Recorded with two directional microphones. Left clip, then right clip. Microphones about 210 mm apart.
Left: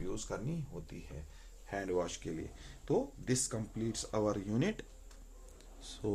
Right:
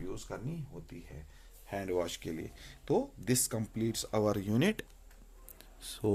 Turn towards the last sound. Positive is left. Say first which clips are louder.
# right 5 dB
turn(degrees=-45)  # may be behind; listen again after turning